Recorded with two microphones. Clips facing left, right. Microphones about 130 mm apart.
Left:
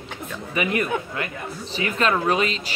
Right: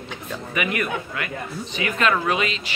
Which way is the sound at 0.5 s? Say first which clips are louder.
Left 2 dB; 30° left (ahead or behind).